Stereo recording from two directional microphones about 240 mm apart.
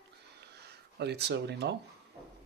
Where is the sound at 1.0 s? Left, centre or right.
Right.